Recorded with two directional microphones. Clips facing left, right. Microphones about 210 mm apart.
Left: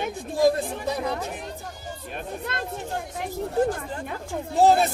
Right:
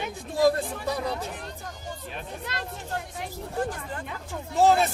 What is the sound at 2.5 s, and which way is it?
Speech, 55° left (ahead or behind).